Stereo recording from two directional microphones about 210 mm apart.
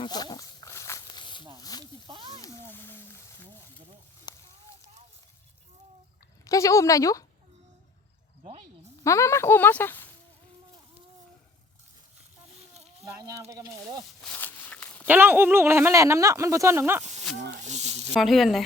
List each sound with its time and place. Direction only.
0.0 s snake: 20° left (ahead or behind)
2.0 s a sound: 25° right (ahead or behind)
2.4 s a sound: 10° left (ahead or behind)
4.3 s a sound: 20° left (ahead or behind)
6.4 s speech: 15° left (ahead or behind)
8.4 s a sound: 25° right (ahead or behind)
9.0 s speech: 15° left (ahead or behind)
13.1 s speech: 15° right (ahead or behind)
14.2 s walk: 5° left (ahead or behind)
15.0 s speech: 10° right (ahead or behind)
17.5 s snake: 35° right (ahead or behind)
18.1 s speech: centre (ahead or behind)